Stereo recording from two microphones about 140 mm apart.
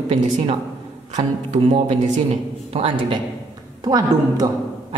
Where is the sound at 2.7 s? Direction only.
40° right (ahead or behind).